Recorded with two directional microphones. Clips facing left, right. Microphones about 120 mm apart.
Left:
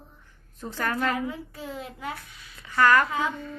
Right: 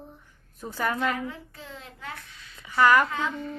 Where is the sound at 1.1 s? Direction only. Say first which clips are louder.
Left 3 dB; 10° left (ahead or behind).